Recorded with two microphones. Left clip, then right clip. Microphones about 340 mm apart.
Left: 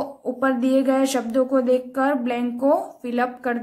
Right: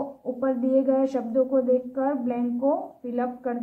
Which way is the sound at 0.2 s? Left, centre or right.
Left.